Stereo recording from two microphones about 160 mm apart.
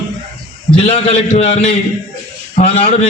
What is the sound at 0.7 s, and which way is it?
A man's voice, 40° left (ahead or behind).